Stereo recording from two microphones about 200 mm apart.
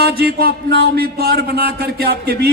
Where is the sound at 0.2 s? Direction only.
50° right (ahead or behind).